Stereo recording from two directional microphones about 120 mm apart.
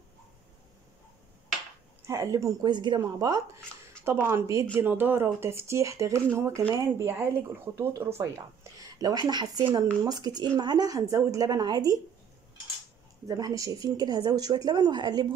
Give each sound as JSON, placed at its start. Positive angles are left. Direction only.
{"t": 2.0, "sound": "speech", "side_deg": -25}
{"t": 2.6, "sound": "speech", "side_deg": -40}
{"t": 8.7, "sound": "speech", "side_deg": -30}
{"t": 13.3, "sound": "speech", "side_deg": -30}